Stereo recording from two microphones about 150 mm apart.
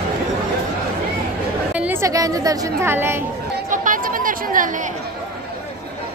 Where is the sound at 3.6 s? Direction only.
60° right (ahead or behind).